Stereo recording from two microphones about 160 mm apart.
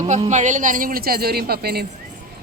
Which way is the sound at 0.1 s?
50° right (ahead or behind).